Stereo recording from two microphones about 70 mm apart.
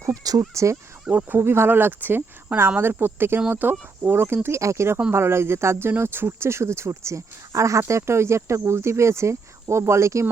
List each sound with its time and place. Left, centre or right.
0.0 s speech: right
1.0 s speech: right
1.4 s speech: right